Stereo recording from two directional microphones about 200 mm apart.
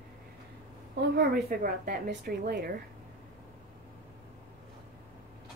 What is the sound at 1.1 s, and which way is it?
A woman's voice, 50° right (ahead or behind).